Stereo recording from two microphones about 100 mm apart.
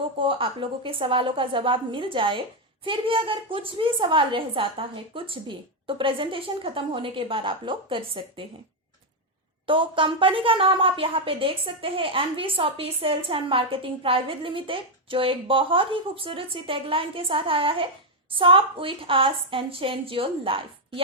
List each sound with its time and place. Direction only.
0.2 s speech: 60° right (ahead or behind)
9.6 s speech: 60° right (ahead or behind)